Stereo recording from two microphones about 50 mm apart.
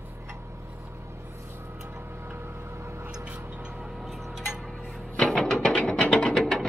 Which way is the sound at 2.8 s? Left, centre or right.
Right.